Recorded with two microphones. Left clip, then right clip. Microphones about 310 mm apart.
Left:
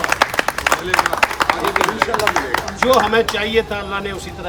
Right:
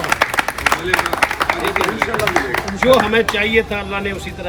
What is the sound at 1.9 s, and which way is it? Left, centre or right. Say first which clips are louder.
Run: left 1 dB; left.